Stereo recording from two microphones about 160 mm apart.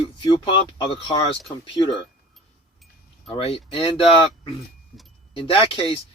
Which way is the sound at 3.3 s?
35° left (ahead or behind).